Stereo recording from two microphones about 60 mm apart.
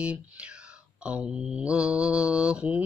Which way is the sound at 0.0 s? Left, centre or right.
Right.